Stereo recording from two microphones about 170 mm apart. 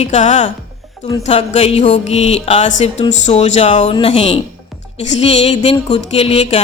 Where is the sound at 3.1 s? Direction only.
45° left (ahead or behind).